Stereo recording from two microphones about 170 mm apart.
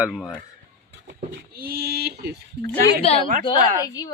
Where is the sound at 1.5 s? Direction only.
65° right (ahead or behind).